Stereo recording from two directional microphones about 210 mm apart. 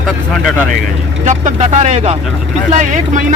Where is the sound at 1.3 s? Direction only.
35° right (ahead or behind).